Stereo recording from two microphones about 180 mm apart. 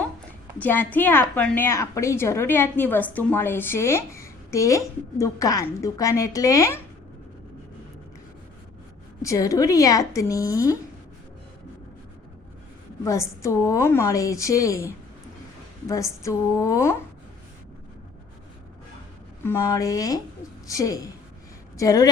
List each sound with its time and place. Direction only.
0.6 s a woman's voice: 10° left (ahead or behind)
9.2 s a woman's voice: 15° left (ahead or behind)
13.1 s a woman's voice: 15° left (ahead or behind)
16.2 s a woman's voice: 15° left (ahead or behind)
19.5 s speech: 15° left (ahead or behind)